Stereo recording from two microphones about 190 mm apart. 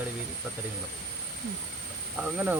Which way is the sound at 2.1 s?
5° right (ahead or behind).